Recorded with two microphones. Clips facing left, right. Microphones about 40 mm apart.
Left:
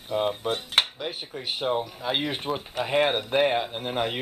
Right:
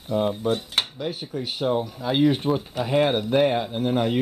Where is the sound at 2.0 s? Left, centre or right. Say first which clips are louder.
Right 7 dB; centre.